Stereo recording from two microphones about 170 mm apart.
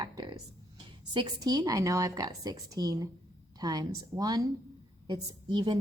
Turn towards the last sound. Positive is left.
turn(degrees=-25)  # may be behind; listen again after turning